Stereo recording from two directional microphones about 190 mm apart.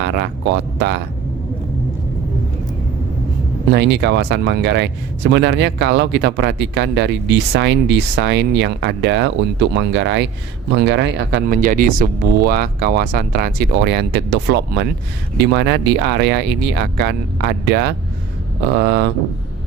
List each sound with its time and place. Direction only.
0.0 s speech: 60° right (ahead or behind)
3.7 s speech: 65° right (ahead or behind)
11.6 s speech: 45° right (ahead or behind)